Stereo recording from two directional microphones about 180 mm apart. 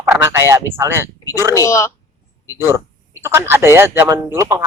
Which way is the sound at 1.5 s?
15° left (ahead or behind).